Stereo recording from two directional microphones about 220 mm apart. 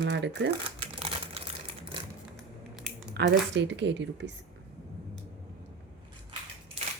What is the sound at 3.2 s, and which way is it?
Speech, 50° right (ahead or behind).